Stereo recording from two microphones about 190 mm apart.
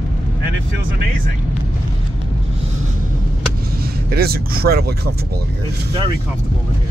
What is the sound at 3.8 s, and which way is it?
Speech, 55° right (ahead or behind).